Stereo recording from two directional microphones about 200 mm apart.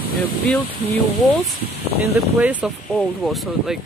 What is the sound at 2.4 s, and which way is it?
Speech, 5° right (ahead or behind).